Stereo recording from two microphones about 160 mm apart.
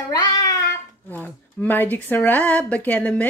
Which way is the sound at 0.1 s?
25° left (ahead or behind).